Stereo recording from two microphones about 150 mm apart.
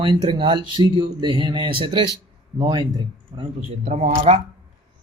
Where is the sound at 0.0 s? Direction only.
35° right (ahead or behind).